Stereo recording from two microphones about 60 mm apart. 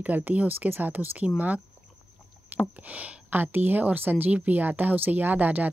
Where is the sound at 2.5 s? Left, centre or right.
Right.